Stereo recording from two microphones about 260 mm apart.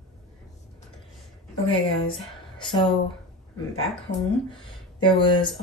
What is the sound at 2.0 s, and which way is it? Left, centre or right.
Speech, centre.